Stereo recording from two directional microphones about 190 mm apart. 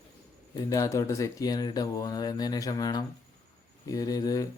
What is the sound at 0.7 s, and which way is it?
Speech, 15° left (ahead or behind).